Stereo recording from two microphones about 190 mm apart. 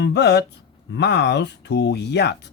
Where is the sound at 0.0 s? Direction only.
65° left (ahead or behind).